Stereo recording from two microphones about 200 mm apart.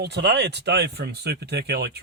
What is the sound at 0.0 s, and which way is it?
Speech, 60° right (ahead or behind).